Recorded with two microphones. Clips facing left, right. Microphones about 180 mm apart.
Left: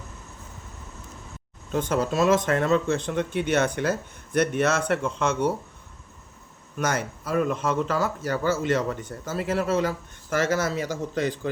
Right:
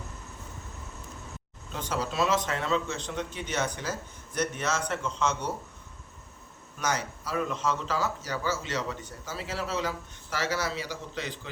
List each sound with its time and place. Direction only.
1.7 s speech: 50° left (ahead or behind)
6.7 s speech: 50° left (ahead or behind)